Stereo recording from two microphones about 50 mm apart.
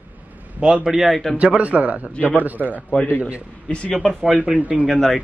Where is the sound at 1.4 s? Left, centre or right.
Right.